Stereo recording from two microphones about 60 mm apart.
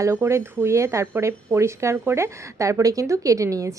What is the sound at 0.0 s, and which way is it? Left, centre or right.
A woman's voice, right.